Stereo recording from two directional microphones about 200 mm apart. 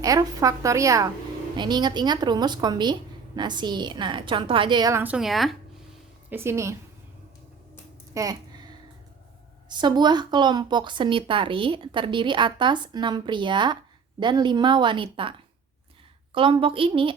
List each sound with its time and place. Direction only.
0.0 s a woman's voice: 15° right (ahead or behind); by 5.5 s centre (ahead or behind)
6.3 s a woman's voice: 10° right (ahead or behind)
8.1 s a sound: 20° right (ahead or behind)
9.6 s a woman's voice: 20° right (ahead or behind)